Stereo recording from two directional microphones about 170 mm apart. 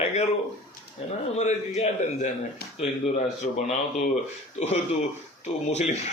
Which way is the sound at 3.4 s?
50° left (ahead or behind).